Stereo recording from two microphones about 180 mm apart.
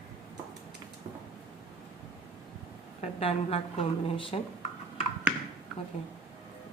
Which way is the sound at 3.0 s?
30° left (ahead or behind).